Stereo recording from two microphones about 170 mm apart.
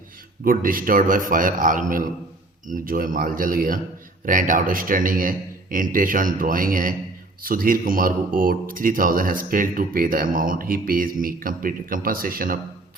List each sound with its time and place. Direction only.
0.4 s a man's voice: 55° right (ahead or behind)